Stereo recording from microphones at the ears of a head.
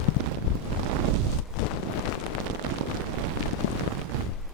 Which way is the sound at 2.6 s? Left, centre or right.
Right.